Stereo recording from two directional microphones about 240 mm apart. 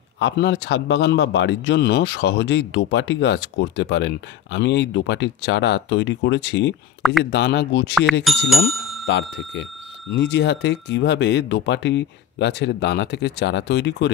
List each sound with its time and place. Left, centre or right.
0.2 s speech: left
8.1 s speech: centre
9.0 s speech: left